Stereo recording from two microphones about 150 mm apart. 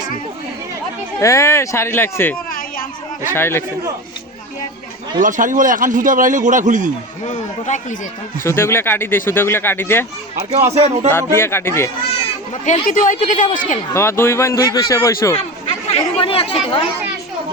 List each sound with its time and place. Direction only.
1.2 s speech: 20° left (ahead or behind)
2.5 s a sound: 70° left (ahead or behind)
3.3 s speech: 15° left (ahead or behind)
5.2 s a man's voice: 60° right (ahead or behind)
7.3 s a man's voice: 55° left (ahead or behind)
8.4 s speech: 15° left (ahead or behind)
10.8 s speech: 50° right (ahead or behind)
11.1 s speech: 15° left (ahead or behind)
12.6 s a woman's voice: 55° left (ahead or behind)
13.9 s a man's voice: 15° left (ahead or behind)
16.0 s speech: 35° left (ahead or behind)